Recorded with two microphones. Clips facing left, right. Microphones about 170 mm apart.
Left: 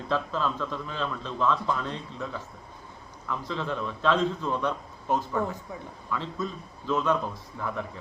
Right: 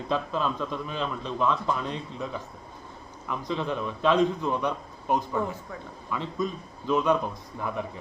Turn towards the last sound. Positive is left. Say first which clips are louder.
# right 1 dB
turn(degrees=-15)  # may be behind; listen again after turning